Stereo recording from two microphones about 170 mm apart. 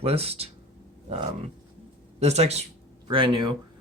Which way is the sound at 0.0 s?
35° right (ahead or behind).